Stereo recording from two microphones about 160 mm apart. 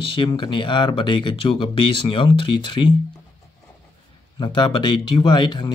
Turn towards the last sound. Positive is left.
turn(degrees=30)  # may be behind; listen again after turning